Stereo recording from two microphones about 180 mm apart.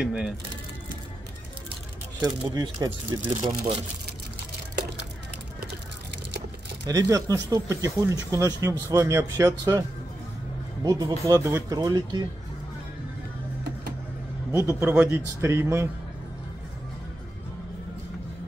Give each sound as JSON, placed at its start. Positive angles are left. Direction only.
{"t": 0.0, "sound": "speech", "side_deg": -5}
{"t": 2.2, "sound": "speech", "side_deg": -20}
{"t": 6.9, "sound": "speech", "side_deg": -20}
{"t": 14.5, "sound": "a man's voice", "side_deg": -15}